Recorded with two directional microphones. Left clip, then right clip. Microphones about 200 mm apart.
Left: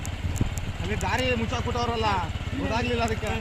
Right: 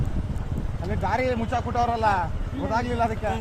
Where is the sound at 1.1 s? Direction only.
30° right (ahead or behind).